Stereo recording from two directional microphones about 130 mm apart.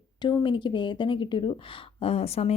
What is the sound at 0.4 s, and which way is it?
A woman's voice, 40° left (ahead or behind).